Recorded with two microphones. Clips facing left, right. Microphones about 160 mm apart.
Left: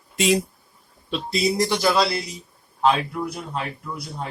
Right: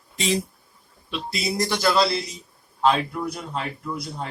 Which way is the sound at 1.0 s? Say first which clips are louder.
Left 4 dB; 35° left (ahead or behind).